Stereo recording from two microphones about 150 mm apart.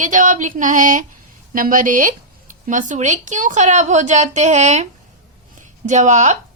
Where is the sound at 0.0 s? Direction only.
55° right (ahead or behind).